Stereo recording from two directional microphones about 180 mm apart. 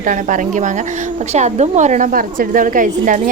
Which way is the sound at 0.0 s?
45° right (ahead or behind).